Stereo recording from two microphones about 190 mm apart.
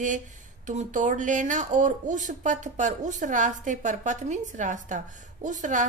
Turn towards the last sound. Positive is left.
turn(degrees=-40)  # may be behind; listen again after turning